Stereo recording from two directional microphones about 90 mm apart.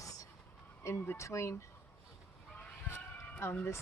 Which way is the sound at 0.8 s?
25° left (ahead or behind).